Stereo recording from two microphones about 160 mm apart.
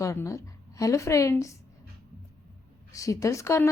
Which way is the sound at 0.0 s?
20° left (ahead or behind).